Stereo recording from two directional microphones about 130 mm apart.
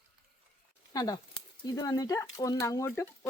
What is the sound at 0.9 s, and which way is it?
Speech, 30° left (ahead or behind).